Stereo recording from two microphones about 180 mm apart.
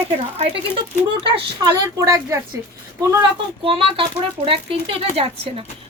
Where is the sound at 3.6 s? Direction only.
30° right (ahead or behind).